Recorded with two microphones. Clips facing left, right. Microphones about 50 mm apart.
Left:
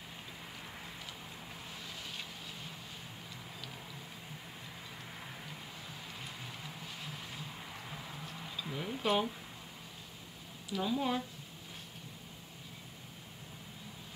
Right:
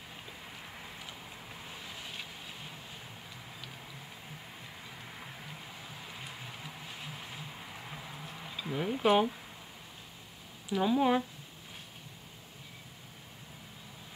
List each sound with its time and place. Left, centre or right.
1.9 s vehicle: centre
5.9 s vehicle: centre
10.7 s speech: right